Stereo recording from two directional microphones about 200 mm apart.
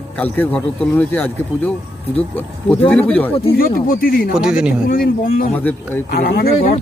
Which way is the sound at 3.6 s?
45° left (ahead or behind).